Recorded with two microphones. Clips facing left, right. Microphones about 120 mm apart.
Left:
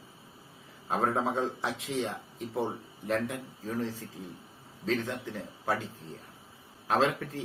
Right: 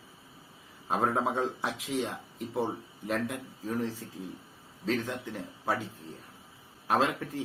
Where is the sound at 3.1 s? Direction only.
10° right (ahead or behind).